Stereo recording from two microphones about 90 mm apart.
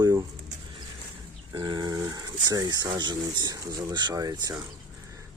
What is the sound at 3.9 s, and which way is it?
Speech, 55° right (ahead or behind).